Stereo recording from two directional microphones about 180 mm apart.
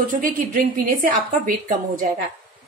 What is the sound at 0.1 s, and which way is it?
A woman's voice, 50° right (ahead or behind).